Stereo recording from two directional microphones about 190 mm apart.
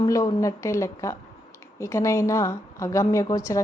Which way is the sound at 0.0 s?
20° left (ahead or behind).